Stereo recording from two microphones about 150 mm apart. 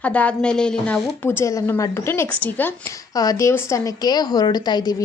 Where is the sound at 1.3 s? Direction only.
20° left (ahead or behind).